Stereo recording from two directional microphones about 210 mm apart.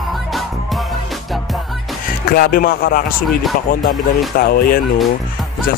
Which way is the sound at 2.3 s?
45° left (ahead or behind).